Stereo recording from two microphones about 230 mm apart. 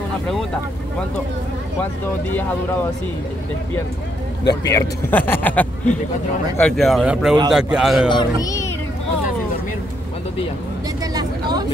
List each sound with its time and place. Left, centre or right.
4.5 s speech: centre
8.1 s speech: centre
11.1 s vehicle: centre